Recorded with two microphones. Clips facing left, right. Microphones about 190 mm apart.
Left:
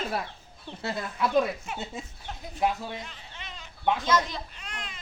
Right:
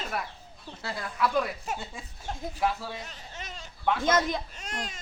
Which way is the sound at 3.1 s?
40° right (ahead or behind).